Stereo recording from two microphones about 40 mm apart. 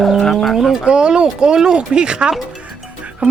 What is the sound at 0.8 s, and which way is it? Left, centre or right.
Speech, right.